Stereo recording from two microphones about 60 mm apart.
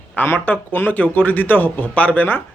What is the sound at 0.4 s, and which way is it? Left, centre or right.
Speech, left.